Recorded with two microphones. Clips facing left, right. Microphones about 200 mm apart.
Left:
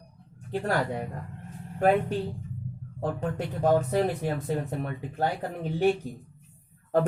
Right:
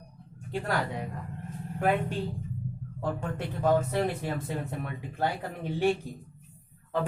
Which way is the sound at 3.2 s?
40° left (ahead or behind).